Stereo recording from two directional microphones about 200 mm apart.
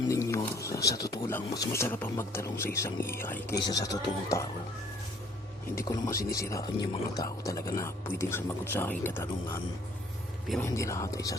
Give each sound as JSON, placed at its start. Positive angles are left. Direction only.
{"t": 0.1, "sound": "a sound", "side_deg": 15}
{"t": 0.9, "sound": "speech", "side_deg": 15}
{"t": 5.7, "sound": "speech", "side_deg": 15}
{"t": 10.7, "sound": "speech", "side_deg": 15}